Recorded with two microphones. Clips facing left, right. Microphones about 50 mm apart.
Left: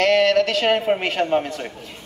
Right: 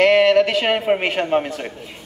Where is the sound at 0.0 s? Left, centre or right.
Centre.